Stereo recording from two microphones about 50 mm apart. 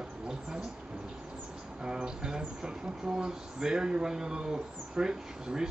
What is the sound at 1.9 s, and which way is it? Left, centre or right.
Speech, centre.